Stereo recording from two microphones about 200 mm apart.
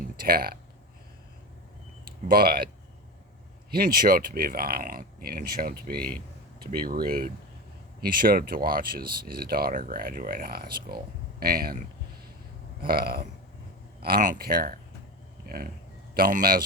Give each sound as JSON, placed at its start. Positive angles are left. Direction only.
{"t": 0.3, "sound": "speech", "side_deg": -50}
{"t": 2.0, "sound": "speech", "side_deg": -45}
{"t": 3.7, "sound": "speech", "side_deg": -45}
{"t": 6.0, "sound": "speech", "side_deg": 5}
{"t": 6.7, "sound": "speech", "side_deg": -45}
{"t": 12.8, "sound": "speech", "side_deg": -50}